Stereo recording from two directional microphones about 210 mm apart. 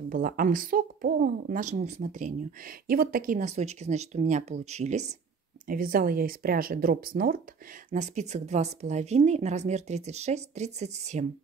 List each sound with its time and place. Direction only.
0.1 s speech: 40° right (ahead or behind)